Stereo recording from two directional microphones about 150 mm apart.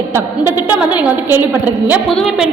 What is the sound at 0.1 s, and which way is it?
A woman's voice, 15° right (ahead or behind).